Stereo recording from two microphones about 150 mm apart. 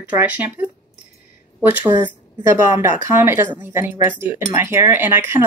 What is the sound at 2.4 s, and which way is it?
Speech, 20° right (ahead or behind).